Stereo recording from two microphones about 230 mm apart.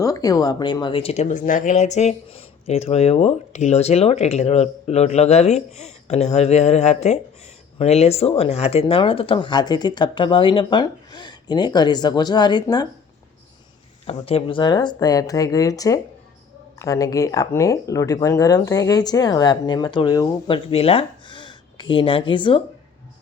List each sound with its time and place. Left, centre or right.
0.0 s speech: centre
14.0 s speech: left